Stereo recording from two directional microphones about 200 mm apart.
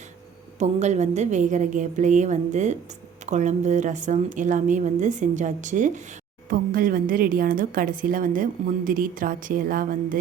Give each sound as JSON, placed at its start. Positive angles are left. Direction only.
{"t": 0.6, "sound": "a woman's voice", "side_deg": -35}